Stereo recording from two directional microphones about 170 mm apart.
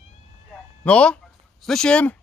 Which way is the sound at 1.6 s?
5° left (ahead or behind).